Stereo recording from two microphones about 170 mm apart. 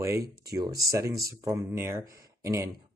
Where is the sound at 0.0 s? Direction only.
20° right (ahead or behind).